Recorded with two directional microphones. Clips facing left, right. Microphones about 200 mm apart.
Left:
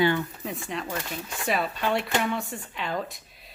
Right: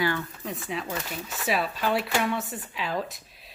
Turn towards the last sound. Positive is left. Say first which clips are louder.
# right 1 dB
turn(degrees=0)  # may be behind; listen again after turning